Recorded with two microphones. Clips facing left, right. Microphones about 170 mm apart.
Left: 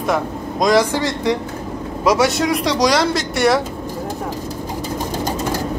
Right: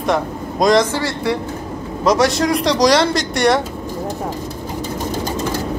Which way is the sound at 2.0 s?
5° left (ahead or behind).